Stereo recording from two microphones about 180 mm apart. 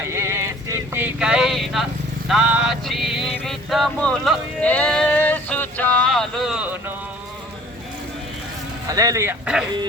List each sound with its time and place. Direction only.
0.1 s vehicle: 15° right (ahead or behind)
3.3 s a sound: centre (ahead or behind)
8.9 s speech: 20° right (ahead or behind)